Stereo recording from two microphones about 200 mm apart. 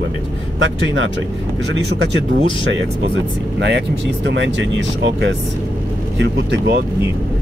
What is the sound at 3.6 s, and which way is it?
Speech, 60° right (ahead or behind).